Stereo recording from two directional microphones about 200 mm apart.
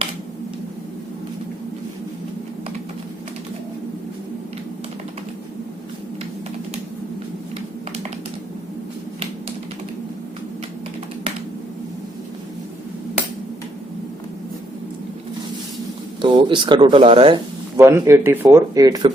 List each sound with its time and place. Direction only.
16.2 s speech: 25° right (ahead or behind)
17.7 s speech: 15° right (ahead or behind)